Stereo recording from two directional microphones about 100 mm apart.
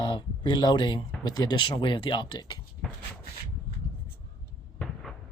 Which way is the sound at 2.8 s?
5° left (ahead or behind).